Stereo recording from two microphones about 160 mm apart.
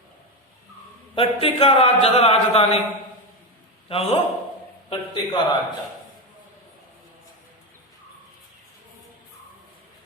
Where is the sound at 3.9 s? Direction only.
35° left (ahead or behind).